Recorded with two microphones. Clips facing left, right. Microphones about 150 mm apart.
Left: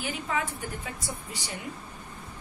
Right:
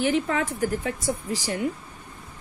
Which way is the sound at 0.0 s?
80° right.